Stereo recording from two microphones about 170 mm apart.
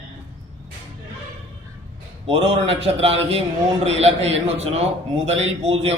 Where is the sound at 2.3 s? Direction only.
35° right (ahead or behind).